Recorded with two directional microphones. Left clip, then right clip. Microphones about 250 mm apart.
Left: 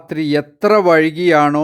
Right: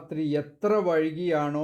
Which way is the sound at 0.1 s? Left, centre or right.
Left.